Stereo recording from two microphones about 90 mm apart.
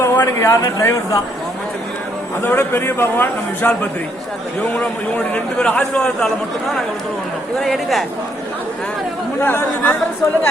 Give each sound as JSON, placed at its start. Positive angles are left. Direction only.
{"t": 0.0, "sound": "speech", "side_deg": 30}
{"t": 2.4, "sound": "a man's voice", "side_deg": 25}
{"t": 4.8, "sound": "a man's voice", "side_deg": 10}
{"t": 7.6, "sound": "speech", "side_deg": 0}
{"t": 9.4, "sound": "a man's voice", "side_deg": 25}